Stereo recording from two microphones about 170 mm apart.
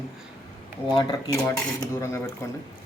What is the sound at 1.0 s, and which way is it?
Speech, 20° left (ahead or behind).